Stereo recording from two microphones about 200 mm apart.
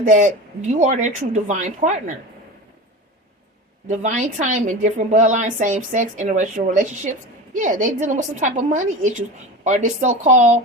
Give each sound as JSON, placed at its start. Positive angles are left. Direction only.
{"t": 0.0, "sound": "a woman's voice", "side_deg": -40}
{"t": 3.8, "sound": "a woman's voice", "side_deg": -35}